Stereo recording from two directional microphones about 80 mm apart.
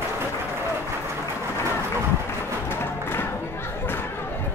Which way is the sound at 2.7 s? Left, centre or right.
Left.